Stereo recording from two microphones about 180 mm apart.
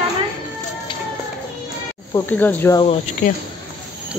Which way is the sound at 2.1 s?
10° left (ahead or behind).